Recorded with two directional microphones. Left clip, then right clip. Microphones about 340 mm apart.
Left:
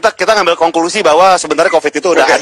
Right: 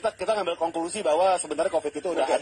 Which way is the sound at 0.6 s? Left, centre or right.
Left.